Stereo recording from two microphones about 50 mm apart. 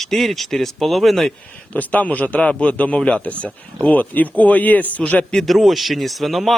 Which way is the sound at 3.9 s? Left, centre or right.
Left.